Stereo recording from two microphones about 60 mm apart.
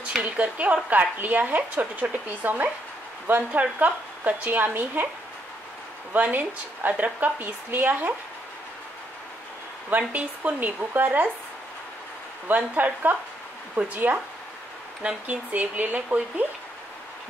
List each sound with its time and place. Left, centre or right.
0.0 s a woman's voice: right
6.1 s speech: right
9.8 s speech: right
12.4 s speech: right
15.2 s speech: right